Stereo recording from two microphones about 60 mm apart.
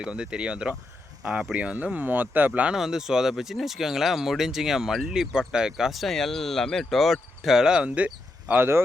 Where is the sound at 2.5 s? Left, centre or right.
Centre.